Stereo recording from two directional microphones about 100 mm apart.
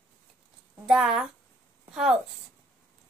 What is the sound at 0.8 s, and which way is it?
Speech, 5° right (ahead or behind).